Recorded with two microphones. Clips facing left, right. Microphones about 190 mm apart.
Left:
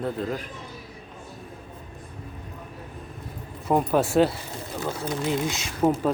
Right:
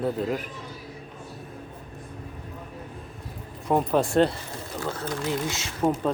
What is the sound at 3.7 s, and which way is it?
Speech, 5° left (ahead or behind).